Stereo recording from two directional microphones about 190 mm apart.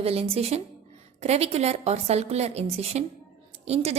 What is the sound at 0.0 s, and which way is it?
A woman's voice, 30° right (ahead or behind).